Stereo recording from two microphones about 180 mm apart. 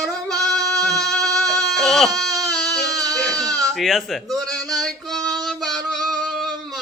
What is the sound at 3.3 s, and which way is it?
Sheep, 20° right (ahead or behind).